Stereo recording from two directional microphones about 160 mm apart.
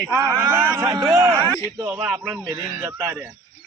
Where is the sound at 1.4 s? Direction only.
10° left (ahead or behind).